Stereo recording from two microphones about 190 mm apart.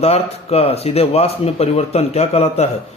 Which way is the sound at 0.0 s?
30° left (ahead or behind).